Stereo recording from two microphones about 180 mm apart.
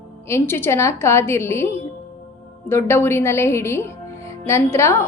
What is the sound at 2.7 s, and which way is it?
A woman's voice, 15° left (ahead or behind).